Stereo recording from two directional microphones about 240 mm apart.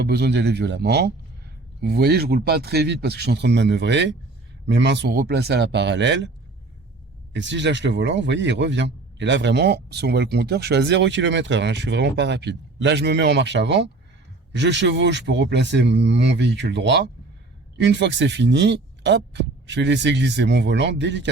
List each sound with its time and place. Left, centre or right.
0.0 s a man's voice: right
7.3 s a man's voice: right